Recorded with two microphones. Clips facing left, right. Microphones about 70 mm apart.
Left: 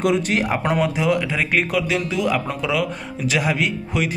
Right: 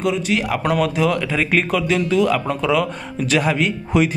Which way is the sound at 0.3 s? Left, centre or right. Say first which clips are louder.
Right 1 dB; left.